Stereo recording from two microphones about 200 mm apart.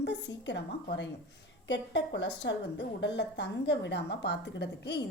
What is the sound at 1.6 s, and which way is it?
A woman's voice, 60° left (ahead or behind).